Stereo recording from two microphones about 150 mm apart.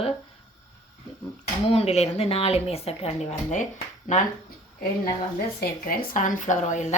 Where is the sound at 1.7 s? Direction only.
45° left (ahead or behind).